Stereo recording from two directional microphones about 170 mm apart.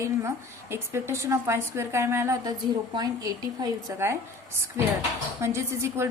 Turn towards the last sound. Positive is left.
turn(degrees=-15)  # may be behind; listen again after turning